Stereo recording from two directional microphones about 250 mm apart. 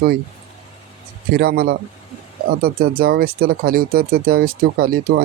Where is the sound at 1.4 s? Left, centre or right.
Right.